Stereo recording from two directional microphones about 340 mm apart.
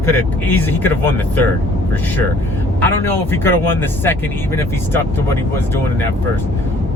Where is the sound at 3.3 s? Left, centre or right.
Centre.